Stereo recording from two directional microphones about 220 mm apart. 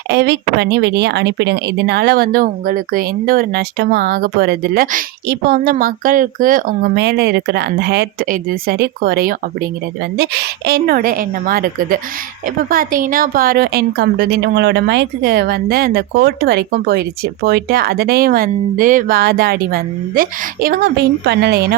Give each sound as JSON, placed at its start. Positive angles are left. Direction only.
{"t": 0.1, "sound": "speech", "side_deg": -50}